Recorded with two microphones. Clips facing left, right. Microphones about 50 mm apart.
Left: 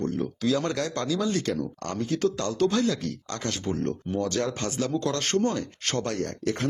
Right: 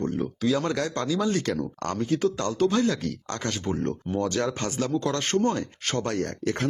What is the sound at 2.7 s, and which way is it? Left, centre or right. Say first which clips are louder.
Speech: right 1 dB; right.